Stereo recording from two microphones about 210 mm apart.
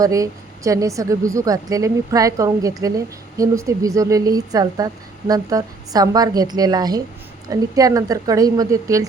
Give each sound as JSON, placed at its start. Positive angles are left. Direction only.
{"t": 0.0, "sound": "a woman's voice", "side_deg": -15}